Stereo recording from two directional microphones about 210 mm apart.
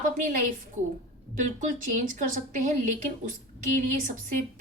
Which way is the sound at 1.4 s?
40° right (ahead or behind).